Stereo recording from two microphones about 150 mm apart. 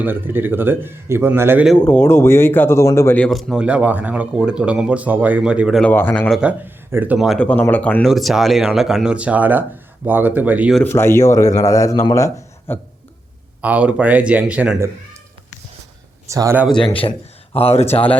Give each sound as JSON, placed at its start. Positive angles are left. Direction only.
{"t": 0.0, "sound": "speech", "side_deg": -15}
{"t": 1.8, "sound": "speech", "side_deg": 15}
{"t": 3.2, "sound": "speech", "side_deg": 0}
{"t": 5.9, "sound": "speech", "side_deg": 10}
{"t": 6.4, "sound": "speech", "side_deg": -10}
{"t": 8.0, "sound": "speech", "side_deg": 0}
{"t": 10.8, "sound": "a man's voice", "side_deg": 15}
{"t": 13.6, "sound": "speech", "side_deg": -10}
{"t": 16.3, "sound": "speech", "side_deg": -20}
{"t": 16.8, "sound": "speech", "side_deg": 35}